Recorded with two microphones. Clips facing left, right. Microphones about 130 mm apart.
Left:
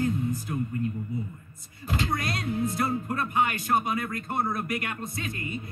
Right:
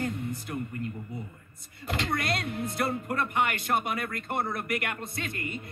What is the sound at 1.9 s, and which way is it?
Speech, 60° right (ahead or behind).